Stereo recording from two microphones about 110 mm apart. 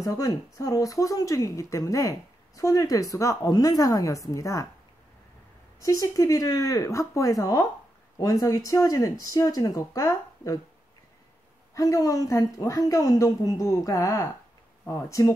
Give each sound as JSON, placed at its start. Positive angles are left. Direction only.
{"t": 0.0, "sound": "a woman's voice", "side_deg": 30}
{"t": 5.8, "sound": "a woman's voice", "side_deg": 30}
{"t": 11.7, "sound": "a woman's voice", "side_deg": 30}